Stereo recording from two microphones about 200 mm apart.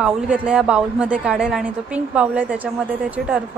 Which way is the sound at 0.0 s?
5° right (ahead or behind).